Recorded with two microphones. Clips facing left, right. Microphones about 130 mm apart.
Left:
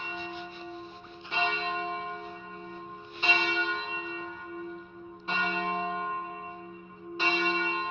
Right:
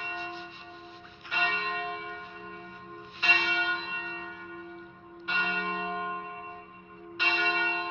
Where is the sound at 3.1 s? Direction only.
25° left (ahead or behind).